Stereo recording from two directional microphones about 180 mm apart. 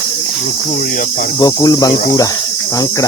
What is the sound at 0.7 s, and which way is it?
Cricket, 50° left (ahead or behind).